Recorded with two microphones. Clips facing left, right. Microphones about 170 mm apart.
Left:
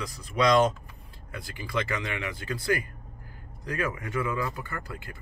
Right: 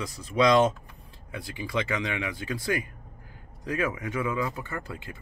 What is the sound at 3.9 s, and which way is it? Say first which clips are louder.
Speech: right 1 dB; 15° right (ahead or behind).